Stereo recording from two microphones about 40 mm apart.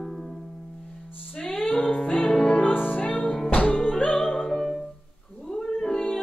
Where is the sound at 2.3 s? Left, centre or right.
Centre.